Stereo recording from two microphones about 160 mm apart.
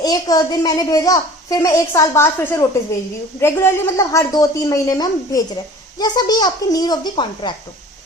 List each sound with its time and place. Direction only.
0.0 s speech: 25° left (ahead or behind)